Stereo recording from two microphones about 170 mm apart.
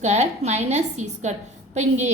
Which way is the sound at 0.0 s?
40° right (ahead or behind).